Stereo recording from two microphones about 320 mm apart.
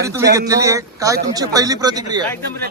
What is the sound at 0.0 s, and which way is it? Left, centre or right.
A man's voice, centre.